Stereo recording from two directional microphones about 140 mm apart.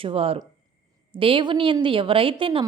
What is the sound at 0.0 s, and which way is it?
A woman's voice, 45° right (ahead or behind).